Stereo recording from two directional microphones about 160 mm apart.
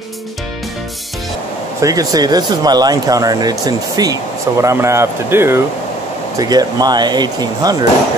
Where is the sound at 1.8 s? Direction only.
20° right (ahead or behind).